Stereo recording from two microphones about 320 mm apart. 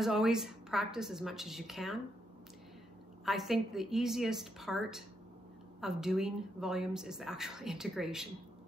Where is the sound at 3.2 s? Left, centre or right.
Centre.